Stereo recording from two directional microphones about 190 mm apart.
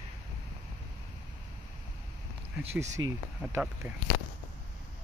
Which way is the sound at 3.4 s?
10° right (ahead or behind).